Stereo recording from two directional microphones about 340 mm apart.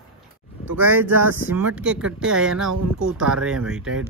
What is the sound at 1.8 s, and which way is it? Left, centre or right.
Speech, centre.